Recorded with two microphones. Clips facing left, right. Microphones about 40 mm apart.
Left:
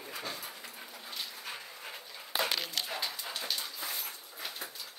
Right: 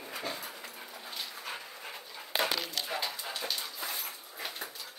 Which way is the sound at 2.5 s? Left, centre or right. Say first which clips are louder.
Even; left.